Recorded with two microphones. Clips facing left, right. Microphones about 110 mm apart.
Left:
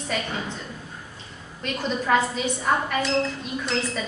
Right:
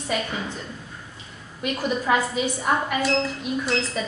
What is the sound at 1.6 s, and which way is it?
A woman's voice, 10° right (ahead or behind).